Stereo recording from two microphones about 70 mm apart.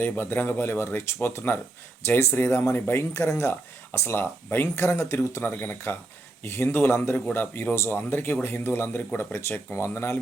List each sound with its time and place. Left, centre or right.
0.0 s speech: left